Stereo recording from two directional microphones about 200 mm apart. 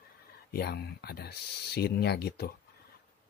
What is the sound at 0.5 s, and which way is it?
Speech, 50° left (ahead or behind).